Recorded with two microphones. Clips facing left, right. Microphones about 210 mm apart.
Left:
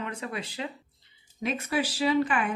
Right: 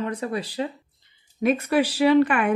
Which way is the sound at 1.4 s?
60° right (ahead or behind).